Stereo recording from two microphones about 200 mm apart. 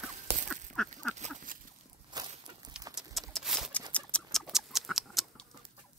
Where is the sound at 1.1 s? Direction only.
35° right (ahead or behind).